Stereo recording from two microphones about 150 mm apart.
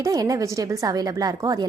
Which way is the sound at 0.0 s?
25° right (ahead or behind).